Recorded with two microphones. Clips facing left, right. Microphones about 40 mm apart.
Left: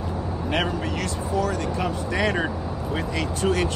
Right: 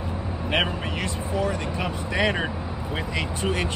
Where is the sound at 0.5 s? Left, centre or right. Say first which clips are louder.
Right 1 dB; right.